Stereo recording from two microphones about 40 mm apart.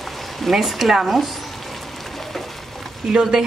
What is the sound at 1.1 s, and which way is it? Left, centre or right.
Frying, centre.